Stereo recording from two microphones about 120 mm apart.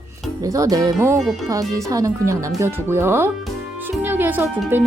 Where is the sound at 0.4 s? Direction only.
30° right (ahead or behind).